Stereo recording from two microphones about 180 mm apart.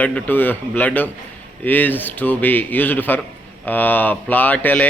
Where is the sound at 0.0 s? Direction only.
10° left (ahead or behind).